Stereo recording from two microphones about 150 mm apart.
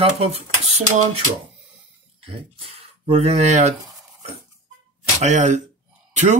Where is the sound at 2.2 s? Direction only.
40° right (ahead or behind).